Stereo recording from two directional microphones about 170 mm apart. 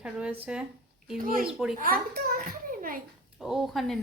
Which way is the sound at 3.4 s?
Centre (ahead or behind).